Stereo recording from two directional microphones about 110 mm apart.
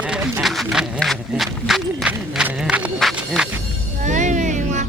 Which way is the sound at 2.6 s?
10° right (ahead or behind).